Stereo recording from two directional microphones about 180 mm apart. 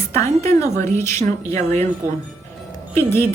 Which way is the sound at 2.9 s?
15° left (ahead or behind).